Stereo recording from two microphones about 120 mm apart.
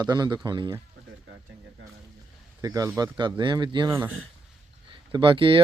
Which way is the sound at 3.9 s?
25° right (ahead or behind).